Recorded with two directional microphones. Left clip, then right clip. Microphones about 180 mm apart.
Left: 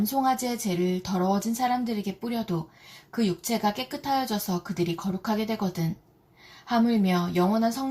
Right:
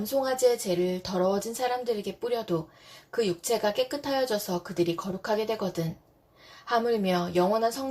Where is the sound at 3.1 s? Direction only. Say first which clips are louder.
Right 2 dB; 35° right (ahead or behind).